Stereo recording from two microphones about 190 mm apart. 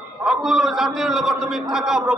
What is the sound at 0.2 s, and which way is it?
A man's voice, centre (ahead or behind).